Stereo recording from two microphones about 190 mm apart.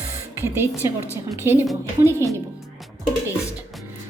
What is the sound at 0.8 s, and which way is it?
Speech, 15° right (ahead or behind).